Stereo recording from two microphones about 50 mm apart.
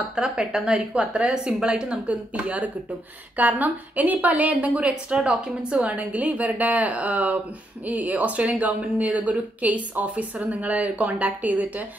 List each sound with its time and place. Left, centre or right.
0.1 s a woman's voice: centre; by 4.8 s right
4.8 s a woman's voice: centre; by 11.8 s right